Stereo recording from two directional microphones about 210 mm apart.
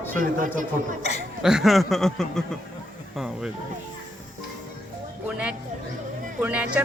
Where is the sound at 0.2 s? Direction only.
40° right (ahead or behind).